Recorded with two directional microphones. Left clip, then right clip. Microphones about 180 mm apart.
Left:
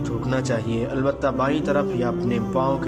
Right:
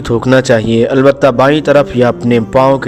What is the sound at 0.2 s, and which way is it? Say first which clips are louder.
Speech: right 17 dB; 50° right (ahead or behind).